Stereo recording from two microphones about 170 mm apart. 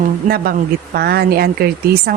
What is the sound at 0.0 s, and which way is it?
A woman's voice, 60° right (ahead or behind).